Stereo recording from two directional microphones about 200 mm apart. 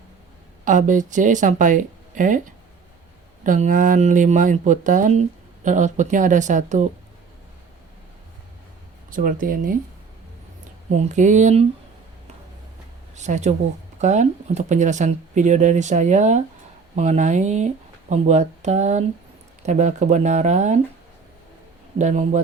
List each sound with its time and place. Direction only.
0.6 s speech: 40° right (ahead or behind)
9.0 s speech: 45° right (ahead or behind)
10.9 s speech: 35° right (ahead or behind)
13.1 s speech: 35° right (ahead or behind)
21.9 s speech: 35° right (ahead or behind)